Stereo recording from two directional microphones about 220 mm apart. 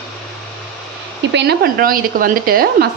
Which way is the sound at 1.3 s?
50° right (ahead or behind).